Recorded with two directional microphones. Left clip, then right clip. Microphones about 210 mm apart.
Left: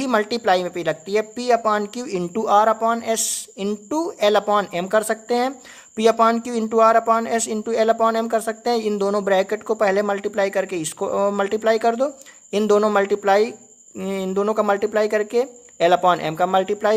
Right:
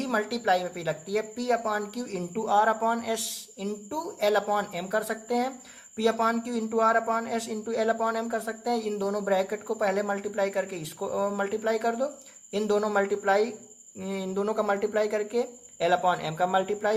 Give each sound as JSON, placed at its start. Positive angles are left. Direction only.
{"t": 0.0, "sound": "speech", "side_deg": 40}